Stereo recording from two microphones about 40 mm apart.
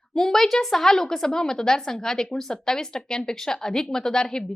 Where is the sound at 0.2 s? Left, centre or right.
Centre.